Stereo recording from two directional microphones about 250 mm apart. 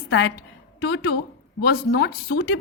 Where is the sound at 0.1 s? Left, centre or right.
Left.